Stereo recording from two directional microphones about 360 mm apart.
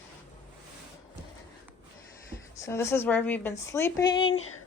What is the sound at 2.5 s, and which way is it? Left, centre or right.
A woman's voice, centre.